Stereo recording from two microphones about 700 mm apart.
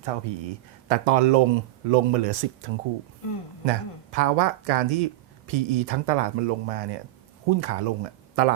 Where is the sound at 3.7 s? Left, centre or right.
Right.